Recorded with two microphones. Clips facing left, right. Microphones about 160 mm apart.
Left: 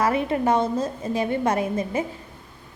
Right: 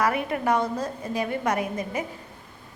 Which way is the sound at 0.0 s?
25° left (ahead or behind).